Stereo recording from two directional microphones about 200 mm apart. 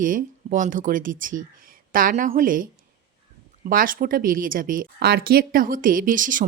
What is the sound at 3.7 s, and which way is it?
Speech, 45° right (ahead or behind).